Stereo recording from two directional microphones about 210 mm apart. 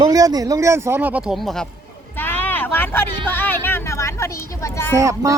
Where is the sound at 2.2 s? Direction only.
10° left (ahead or behind).